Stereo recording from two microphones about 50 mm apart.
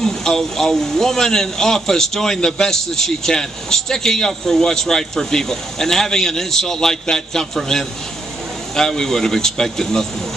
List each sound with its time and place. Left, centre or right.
0.0 s a man's voice: centre